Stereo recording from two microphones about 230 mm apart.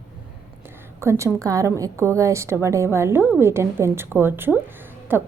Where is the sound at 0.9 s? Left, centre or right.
Centre.